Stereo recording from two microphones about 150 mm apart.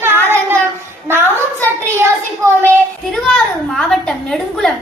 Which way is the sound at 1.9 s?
20° right (ahead or behind).